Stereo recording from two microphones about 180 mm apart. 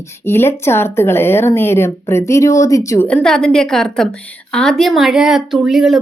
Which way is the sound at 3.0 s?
5° left (ahead or behind).